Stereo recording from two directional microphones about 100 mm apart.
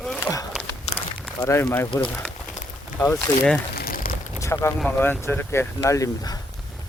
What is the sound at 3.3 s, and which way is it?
Speech, 20° left (ahead or behind).